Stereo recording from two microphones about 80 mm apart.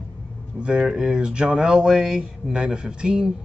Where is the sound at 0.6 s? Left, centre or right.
Centre.